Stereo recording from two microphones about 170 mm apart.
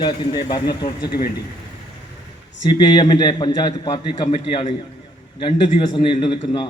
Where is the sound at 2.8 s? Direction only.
25° left (ahead or behind).